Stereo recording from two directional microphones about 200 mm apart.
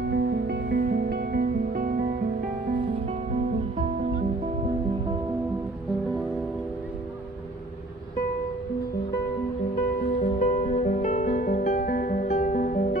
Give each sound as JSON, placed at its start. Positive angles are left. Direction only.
{"t": 0.0, "sound": "music", "side_deg": -55}
{"t": 10.0, "sound": "music", "side_deg": 35}